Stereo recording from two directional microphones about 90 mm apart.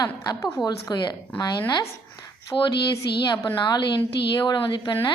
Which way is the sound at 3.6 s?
55° left (ahead or behind).